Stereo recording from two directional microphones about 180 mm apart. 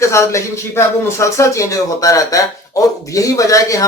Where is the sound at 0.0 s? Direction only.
15° left (ahead or behind).